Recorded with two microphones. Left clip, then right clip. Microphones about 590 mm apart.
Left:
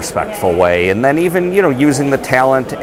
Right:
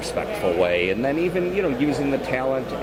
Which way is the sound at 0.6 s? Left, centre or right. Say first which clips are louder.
Left 11 dB; left.